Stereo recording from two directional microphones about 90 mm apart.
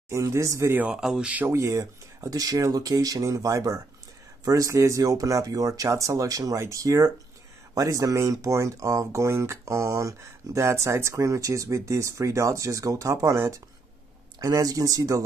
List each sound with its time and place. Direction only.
0.1 s speech: 35° right (ahead or behind)
0.8 s speech: 5° right (ahead or behind)
1.5 s speech: 35° right (ahead or behind)